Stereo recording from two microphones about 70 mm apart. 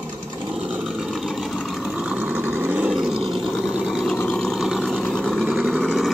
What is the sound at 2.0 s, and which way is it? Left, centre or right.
Vehicle, centre.